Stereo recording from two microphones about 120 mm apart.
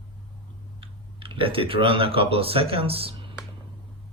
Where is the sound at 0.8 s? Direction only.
45° right (ahead or behind).